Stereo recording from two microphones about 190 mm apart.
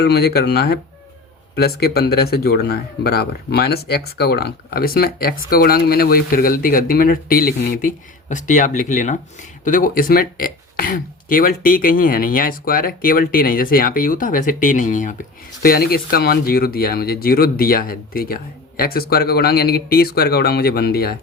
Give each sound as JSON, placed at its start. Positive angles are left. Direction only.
{"t": 0.0, "sound": "speech", "side_deg": 55}
{"t": 15.6, "sound": "speech", "side_deg": 55}